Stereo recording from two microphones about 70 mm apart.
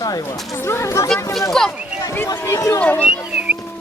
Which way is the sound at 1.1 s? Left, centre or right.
Centre.